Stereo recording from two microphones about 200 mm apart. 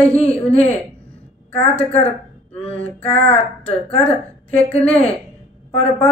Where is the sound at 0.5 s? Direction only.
30° left (ahead or behind).